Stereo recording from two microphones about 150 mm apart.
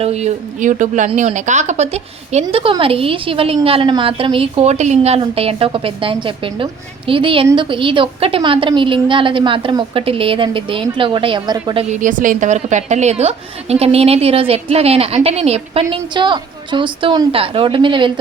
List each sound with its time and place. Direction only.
0.0 s a woman's voice: 45° right (ahead or behind)
2.5 s a woman's voice: 35° right (ahead or behind)
11.9 s a woman's voice: 60° right (ahead or behind); by 18.1 s 35° right (ahead or behind)